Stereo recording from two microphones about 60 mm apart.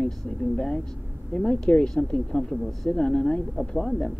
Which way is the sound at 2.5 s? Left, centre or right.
Centre.